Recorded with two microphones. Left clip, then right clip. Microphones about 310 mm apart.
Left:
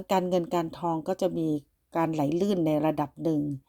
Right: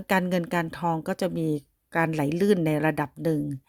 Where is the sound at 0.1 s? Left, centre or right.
Right.